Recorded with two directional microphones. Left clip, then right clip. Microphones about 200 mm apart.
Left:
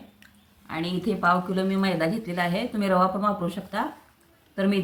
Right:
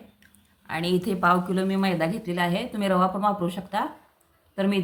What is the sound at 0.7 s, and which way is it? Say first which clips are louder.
Speech: right 3 dB; 50° right (ahead or behind).